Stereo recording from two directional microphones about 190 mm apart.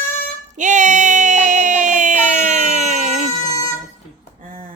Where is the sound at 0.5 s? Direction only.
40° right (ahead or behind).